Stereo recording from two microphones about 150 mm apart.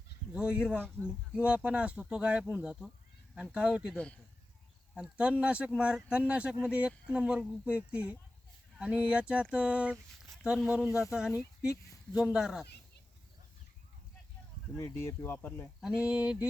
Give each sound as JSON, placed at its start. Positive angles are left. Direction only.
{"t": 0.3, "sound": "speech", "side_deg": -5}
{"t": 3.9, "sound": "speech", "side_deg": 10}
{"t": 4.9, "sound": "speech", "side_deg": -5}
{"t": 14.8, "sound": "speech", "side_deg": 20}
{"t": 15.8, "sound": "speech", "side_deg": -5}